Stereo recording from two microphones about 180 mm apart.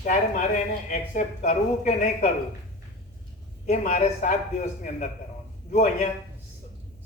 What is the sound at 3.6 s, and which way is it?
A man's voice, 40° left (ahead or behind).